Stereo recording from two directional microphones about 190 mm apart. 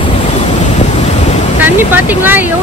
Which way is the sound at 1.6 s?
10° right (ahead or behind).